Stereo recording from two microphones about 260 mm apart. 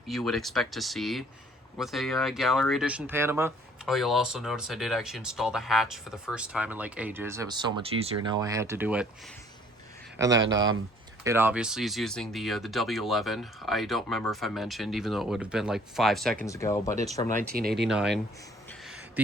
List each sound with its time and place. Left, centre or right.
0.1 s speech: centre
10.2 s speech: centre
10.4 s speech: right
11.2 s speech: centre
17.5 s speech: right
17.7 s speech: centre